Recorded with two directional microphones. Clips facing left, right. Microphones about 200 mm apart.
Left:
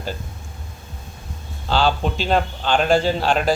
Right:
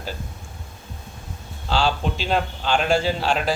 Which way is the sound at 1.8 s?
Centre (ahead or behind).